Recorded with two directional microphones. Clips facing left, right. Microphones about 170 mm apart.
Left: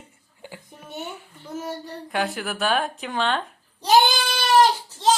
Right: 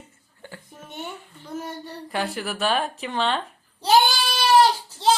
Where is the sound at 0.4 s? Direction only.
15° left (ahead or behind).